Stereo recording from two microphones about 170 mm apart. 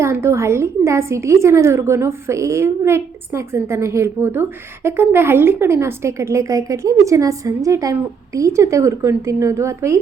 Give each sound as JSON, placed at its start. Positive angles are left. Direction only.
{"t": 0.0, "sound": "a woman's voice", "side_deg": -15}